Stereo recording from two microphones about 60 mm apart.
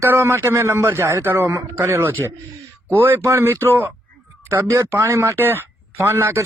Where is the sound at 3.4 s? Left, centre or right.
Right.